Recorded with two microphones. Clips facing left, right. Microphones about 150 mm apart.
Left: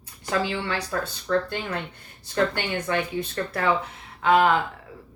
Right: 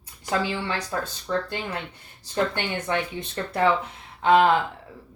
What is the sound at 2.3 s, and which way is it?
Speech, 20° right (ahead or behind).